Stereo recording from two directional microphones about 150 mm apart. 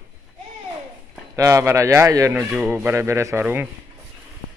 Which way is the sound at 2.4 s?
5° right (ahead or behind).